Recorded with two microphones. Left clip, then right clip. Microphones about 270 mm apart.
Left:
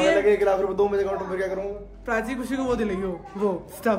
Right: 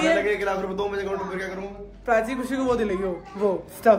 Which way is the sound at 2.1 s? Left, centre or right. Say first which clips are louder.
Right 4 dB; centre.